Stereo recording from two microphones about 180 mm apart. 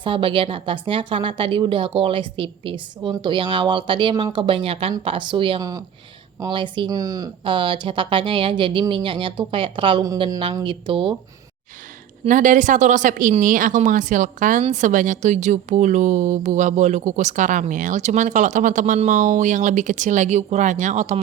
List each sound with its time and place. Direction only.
0.0 s a woman's voice: 30° right (ahead or behind)
12.2 s speech: 45° right (ahead or behind)